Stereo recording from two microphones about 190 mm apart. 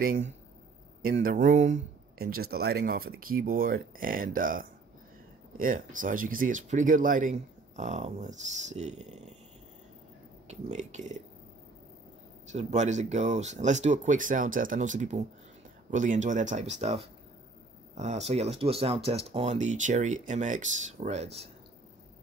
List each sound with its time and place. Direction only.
1.1 s speech: 45° right (ahead or behind)
10.5 s speech: 35° right (ahead or behind)
12.5 s speech: 35° right (ahead or behind)